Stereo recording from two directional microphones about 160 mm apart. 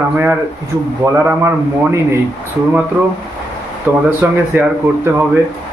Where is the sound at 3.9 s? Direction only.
10° right (ahead or behind).